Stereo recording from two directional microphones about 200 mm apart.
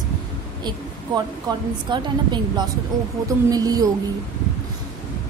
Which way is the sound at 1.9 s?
25° right (ahead or behind).